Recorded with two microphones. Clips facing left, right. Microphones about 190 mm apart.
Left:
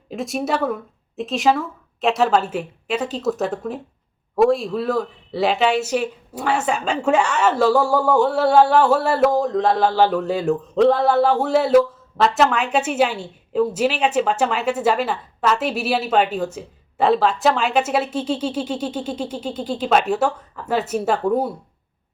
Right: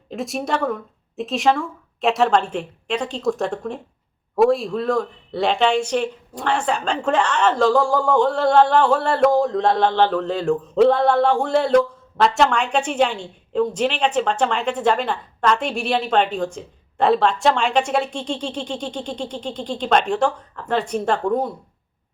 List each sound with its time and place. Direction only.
0.1 s a man's voice: centre (ahead or behind)